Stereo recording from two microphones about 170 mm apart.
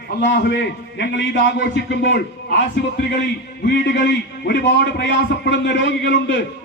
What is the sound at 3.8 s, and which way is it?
A man's voice, 75° left (ahead or behind).